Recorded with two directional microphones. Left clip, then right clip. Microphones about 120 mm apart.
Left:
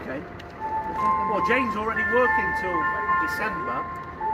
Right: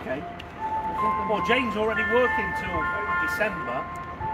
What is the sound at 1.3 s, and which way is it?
Speech, 20° right (ahead or behind).